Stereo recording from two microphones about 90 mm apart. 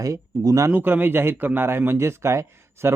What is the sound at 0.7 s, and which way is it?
Speech, 20° right (ahead or behind).